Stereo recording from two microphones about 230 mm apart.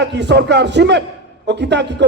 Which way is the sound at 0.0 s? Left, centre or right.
Right.